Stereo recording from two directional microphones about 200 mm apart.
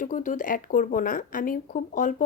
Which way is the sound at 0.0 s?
40° left (ahead or behind).